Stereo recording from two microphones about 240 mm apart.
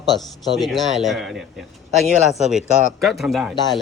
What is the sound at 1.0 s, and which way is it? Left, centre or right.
Speech, centre.